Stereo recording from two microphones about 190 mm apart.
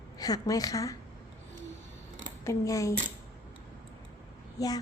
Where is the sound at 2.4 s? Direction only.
15° left (ahead or behind).